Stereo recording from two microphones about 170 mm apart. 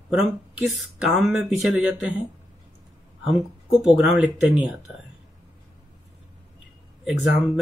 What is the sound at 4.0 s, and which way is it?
Speech, 5° right (ahead or behind).